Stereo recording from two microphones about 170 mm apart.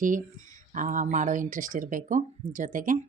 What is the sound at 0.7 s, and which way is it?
Speech, 50° right (ahead or behind).